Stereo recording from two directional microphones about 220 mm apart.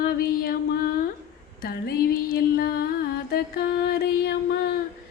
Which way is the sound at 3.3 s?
45° left (ahead or behind).